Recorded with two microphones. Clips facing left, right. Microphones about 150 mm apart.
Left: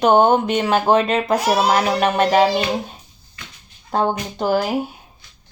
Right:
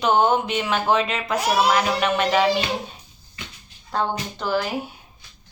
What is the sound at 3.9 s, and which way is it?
Speech, 45° left (ahead or behind).